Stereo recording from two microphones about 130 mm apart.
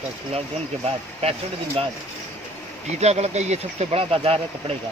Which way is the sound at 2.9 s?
55° right (ahead or behind).